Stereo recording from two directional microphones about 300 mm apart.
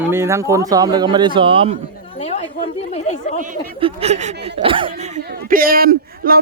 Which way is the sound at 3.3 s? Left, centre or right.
Right.